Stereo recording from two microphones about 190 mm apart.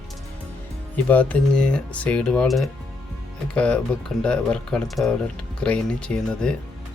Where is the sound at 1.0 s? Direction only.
5° left (ahead or behind).